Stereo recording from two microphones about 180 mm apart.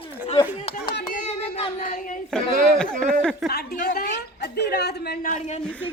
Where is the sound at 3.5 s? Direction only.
55° left (ahead or behind).